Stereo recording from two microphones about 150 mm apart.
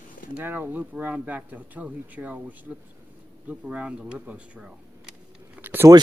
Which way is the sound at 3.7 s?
5° right (ahead or behind).